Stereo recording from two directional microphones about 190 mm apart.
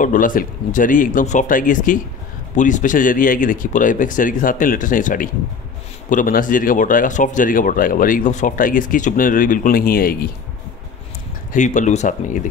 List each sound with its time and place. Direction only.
0.0 s speech: 45° left (ahead or behind)
11.5 s speech: 40° left (ahead or behind)